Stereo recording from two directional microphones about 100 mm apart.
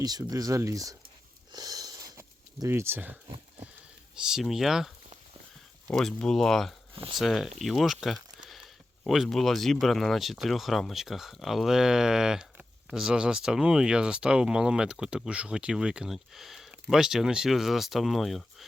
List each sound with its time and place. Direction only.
0.0 s speech: 40° right (ahead or behind)
1.5 s sniff: 40° right (ahead or behind); by 3.2 s 20° right (ahead or behind)
4.1 s speech: 5° right (ahead or behind)
5.9 s speech: 5° left (ahead or behind)
6.9 s speech: 65° right (ahead or behind)
7.2 s speech: centre (ahead or behind)